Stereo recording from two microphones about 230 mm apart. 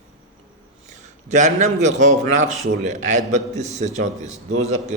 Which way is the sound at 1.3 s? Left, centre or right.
Right.